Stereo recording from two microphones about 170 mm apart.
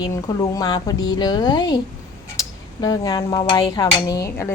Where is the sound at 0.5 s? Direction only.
20° left (ahead or behind).